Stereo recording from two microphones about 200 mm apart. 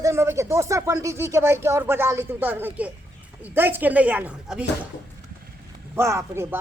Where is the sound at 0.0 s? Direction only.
15° right (ahead or behind).